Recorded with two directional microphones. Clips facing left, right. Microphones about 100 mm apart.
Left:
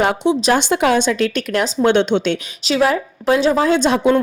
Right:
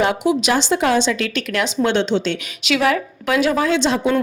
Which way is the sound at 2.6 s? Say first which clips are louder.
Left 2 dB; 30° left (ahead or behind).